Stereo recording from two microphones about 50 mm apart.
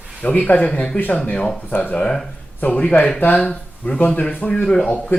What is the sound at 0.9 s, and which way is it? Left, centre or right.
Speech, left.